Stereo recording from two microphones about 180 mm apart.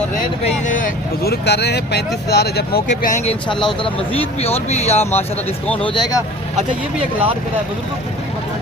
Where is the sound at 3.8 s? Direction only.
35° left (ahead or behind).